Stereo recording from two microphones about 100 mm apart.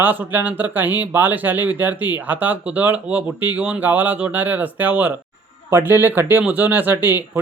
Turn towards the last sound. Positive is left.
turn(degrees=-20)  # may be behind; listen again after turning